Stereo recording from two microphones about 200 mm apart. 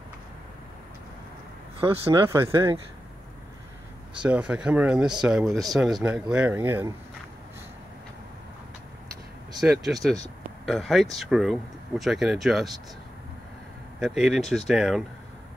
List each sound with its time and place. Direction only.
1.8 s speech: 25° right (ahead or behind)
2.2 s speech: 15° right (ahead or behind)
4.2 s speech: 5° right (ahead or behind)
9.6 s speech: centre (ahead or behind)
13.9 s speech: 5° right (ahead or behind)